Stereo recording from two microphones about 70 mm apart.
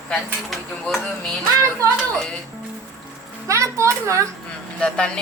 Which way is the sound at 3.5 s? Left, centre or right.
Right.